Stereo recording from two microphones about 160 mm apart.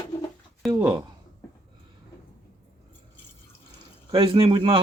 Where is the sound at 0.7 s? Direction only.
25° right (ahead or behind).